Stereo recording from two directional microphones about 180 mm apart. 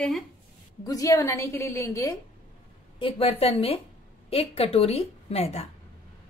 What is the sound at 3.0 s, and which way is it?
A woman's voice, 30° left (ahead or behind).